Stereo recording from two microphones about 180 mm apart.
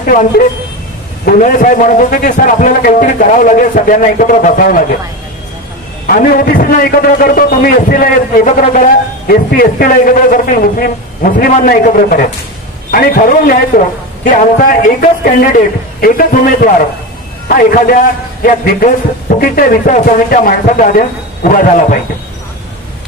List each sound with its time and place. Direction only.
0.0 s a man's voice: 45° left (ahead or behind)
6.0 s a man's voice: 50° left (ahead or behind)